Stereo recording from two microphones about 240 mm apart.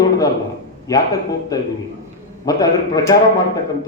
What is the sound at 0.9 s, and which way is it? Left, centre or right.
Speech, centre.